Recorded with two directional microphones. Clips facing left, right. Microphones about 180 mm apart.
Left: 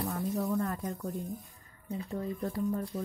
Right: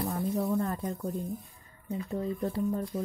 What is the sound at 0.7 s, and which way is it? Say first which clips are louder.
Speech: right 2 dB; 25° right (ahead or behind).